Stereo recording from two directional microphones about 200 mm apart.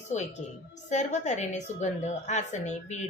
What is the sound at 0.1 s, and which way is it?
A woman's voice, 35° left (ahead or behind).